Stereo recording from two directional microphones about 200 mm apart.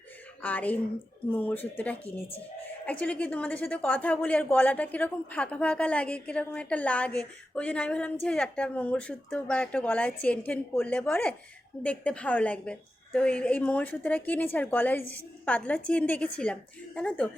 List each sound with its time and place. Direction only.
0.4 s a woman's voice: 10° left (ahead or behind)